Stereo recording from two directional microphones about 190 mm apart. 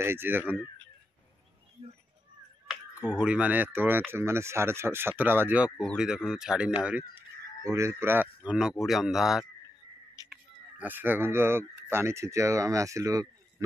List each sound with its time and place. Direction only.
0.0 s speech: 10° right (ahead or behind)
3.1 s speech: 5° right (ahead or behind)